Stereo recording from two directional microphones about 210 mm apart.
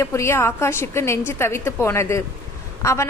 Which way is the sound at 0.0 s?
15° left (ahead or behind).